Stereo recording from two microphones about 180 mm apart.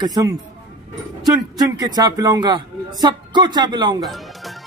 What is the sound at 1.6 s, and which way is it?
Speech, 20° right (ahead or behind).